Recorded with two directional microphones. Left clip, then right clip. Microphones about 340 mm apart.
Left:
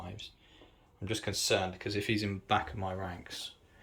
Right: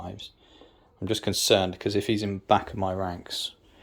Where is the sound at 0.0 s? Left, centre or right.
Centre.